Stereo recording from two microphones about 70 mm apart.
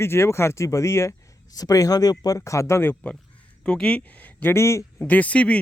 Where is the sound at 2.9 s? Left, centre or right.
Centre.